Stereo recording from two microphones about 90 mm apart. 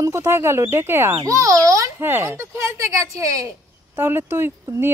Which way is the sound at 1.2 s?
35° right (ahead or behind).